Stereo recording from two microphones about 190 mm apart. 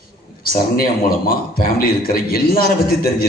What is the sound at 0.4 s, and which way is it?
A man's voice, 50° left (ahead or behind).